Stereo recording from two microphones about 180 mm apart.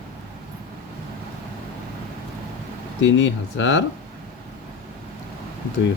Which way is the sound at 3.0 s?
90° left.